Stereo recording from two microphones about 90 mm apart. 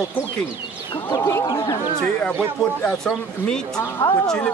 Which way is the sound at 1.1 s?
30° left (ahead or behind).